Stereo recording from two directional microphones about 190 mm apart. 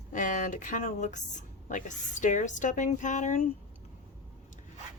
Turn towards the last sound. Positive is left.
turn(degrees=40)  # may be behind; listen again after turning